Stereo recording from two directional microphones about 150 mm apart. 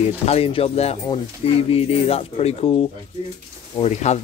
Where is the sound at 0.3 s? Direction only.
40° left (ahead or behind).